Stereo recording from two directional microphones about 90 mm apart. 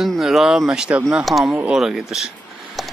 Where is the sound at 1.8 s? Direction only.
5° right (ahead or behind).